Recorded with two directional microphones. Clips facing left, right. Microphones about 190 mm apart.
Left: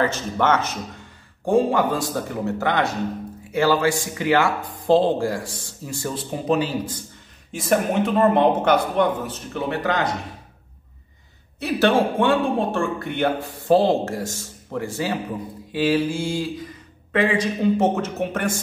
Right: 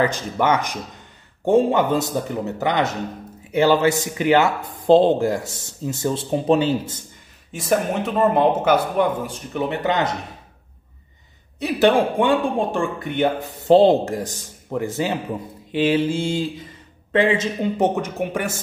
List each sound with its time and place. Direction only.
0.0 s speech: 15° right (ahead or behind)
7.5 s speech: centre (ahead or behind); by 10.1 s 20° right (ahead or behind)
11.6 s speech: 15° right (ahead or behind)